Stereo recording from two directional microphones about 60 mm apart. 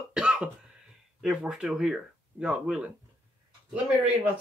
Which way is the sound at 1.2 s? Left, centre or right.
Centre.